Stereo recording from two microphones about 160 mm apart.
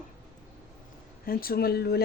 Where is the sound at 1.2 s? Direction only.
65° left (ahead or behind).